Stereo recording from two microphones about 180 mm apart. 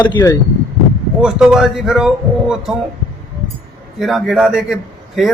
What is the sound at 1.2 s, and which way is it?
Speech, 5° right (ahead or behind).